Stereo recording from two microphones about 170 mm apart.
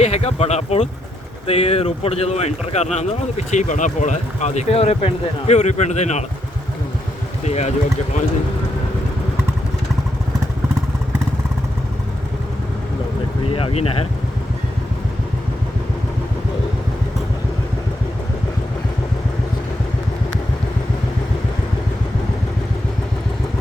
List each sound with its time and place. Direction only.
0.0 s a man's voice: 40° left (ahead or behind)
7.4 s a man's voice: 40° left (ahead or behind)
13.5 s speech: 35° left (ahead or behind)